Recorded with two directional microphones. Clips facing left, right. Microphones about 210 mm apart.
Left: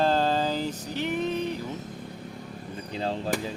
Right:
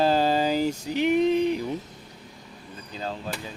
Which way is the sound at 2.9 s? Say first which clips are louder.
Left 3 dB; 30° left (ahead or behind).